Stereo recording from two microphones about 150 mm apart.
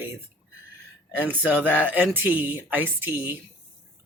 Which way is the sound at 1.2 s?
10° right (ahead or behind).